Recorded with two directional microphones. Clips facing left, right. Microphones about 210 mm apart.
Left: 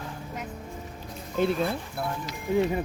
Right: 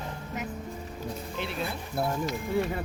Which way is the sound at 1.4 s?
45° left (ahead or behind).